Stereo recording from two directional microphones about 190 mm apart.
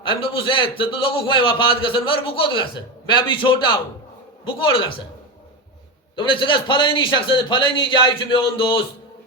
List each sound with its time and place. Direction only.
0.0 s a man's voice: 25° left (ahead or behind)
6.1 s a man's voice: 25° left (ahead or behind)